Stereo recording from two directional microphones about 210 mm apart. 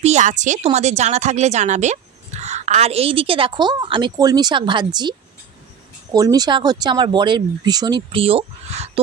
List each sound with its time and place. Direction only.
0.0 s a woman's voice: 35° right (ahead or behind)
6.1 s speech: 15° right (ahead or behind)